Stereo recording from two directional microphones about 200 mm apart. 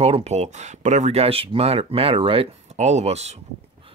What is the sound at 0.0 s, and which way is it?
Speech, 30° right (ahead or behind).